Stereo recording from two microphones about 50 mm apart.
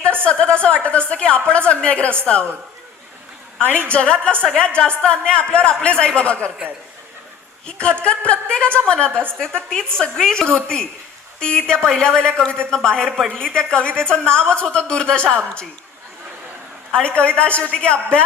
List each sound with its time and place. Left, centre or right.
0.3 s a man's voice: left
3.6 s a woman's voice: right
3.8 s a man's voice: left
8.0 s a man's voice: left
16.9 s a man's voice: centre